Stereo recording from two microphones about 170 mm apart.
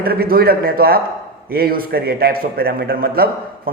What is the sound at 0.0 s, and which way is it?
Speech, 60° right (ahead or behind).